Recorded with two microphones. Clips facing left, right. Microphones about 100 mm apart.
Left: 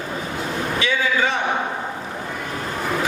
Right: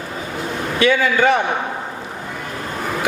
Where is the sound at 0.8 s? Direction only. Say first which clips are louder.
Right 7 dB; 55° right (ahead or behind).